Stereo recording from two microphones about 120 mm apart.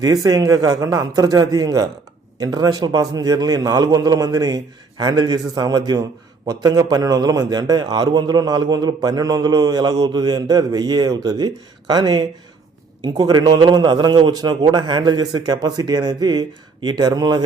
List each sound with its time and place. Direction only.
0.0 s a man's voice: 30° right (ahead or behind)